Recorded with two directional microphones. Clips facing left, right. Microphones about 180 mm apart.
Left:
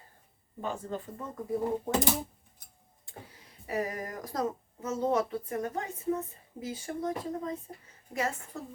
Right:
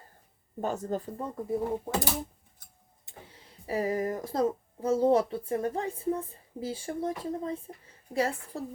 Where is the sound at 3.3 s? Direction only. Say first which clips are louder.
Right 2 dB; 30° right (ahead or behind).